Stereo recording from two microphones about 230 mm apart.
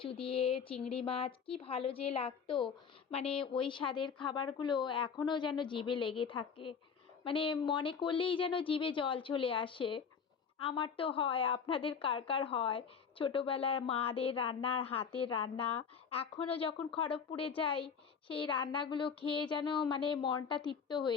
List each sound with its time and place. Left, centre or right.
0.0 s a woman's voice: left